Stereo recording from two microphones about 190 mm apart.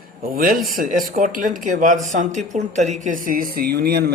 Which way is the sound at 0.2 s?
50° right (ahead or behind).